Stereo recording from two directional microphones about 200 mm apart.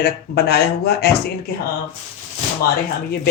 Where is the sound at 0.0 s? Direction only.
50° left (ahead or behind).